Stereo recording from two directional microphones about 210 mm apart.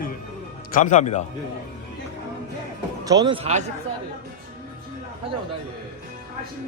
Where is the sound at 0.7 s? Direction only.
35° left (ahead or behind).